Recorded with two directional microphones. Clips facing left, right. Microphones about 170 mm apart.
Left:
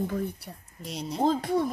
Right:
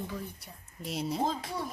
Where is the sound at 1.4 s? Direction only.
55° left (ahead or behind).